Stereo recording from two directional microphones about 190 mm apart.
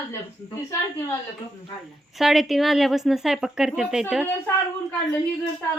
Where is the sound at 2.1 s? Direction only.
Centre (ahead or behind).